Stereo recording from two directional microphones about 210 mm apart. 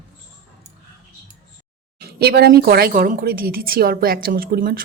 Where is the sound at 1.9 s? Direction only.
45° right (ahead or behind).